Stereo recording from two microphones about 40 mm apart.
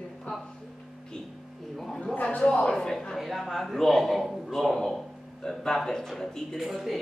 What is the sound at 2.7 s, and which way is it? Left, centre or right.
A man's voice, centre.